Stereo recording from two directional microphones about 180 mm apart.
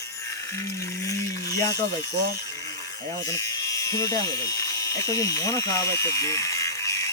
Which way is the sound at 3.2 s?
20° left (ahead or behind).